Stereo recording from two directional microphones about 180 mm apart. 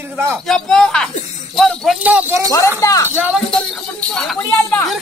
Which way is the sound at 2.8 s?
15° left (ahead or behind).